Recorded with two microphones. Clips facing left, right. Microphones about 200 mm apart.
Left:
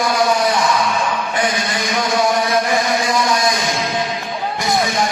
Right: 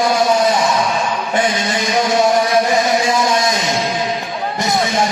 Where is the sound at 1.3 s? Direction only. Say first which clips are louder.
Right 3 dB; 25° right (ahead or behind).